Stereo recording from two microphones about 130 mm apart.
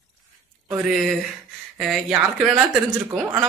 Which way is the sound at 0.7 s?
5° right (ahead or behind).